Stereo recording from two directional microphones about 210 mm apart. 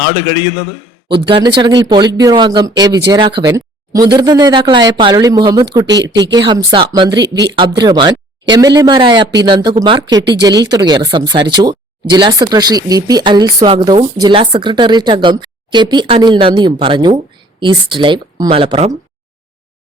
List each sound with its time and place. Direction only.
1.1 s speech: 25° right (ahead or behind)